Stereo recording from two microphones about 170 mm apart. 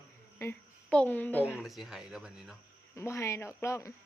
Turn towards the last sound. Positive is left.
turn(degrees=15)  # may be behind; listen again after turning